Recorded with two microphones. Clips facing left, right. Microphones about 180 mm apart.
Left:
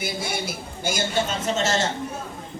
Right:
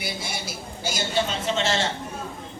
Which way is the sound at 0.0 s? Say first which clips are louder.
Left 4 dB; 50° left (ahead or behind).